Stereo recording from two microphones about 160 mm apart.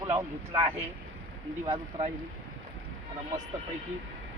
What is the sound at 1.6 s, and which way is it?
Speech, 30° right (ahead or behind).